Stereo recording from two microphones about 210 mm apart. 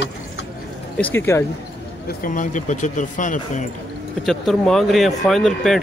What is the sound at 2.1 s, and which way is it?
Speech, 40° left (ahead or behind).